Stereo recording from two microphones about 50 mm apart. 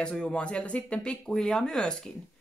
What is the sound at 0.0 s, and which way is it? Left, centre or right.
Speech, centre.